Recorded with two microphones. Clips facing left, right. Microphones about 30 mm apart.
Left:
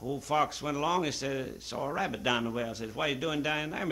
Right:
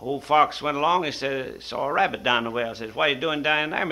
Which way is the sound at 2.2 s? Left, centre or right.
Right.